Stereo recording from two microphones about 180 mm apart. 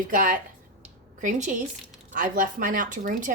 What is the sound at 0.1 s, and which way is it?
Speech, 50° right (ahead or behind).